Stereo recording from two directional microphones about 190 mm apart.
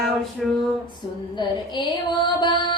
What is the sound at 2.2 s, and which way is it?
Music, 25° left (ahead or behind).